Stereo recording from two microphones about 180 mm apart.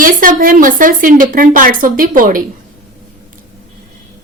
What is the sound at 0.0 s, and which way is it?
Speech, 50° right (ahead or behind).